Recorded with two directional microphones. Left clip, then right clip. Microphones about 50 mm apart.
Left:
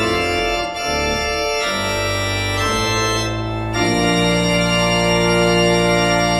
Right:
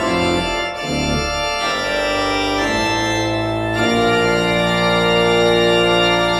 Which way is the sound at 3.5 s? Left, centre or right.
Centre.